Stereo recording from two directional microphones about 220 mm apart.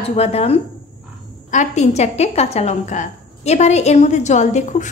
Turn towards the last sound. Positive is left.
turn(degrees=30)  # may be behind; listen again after turning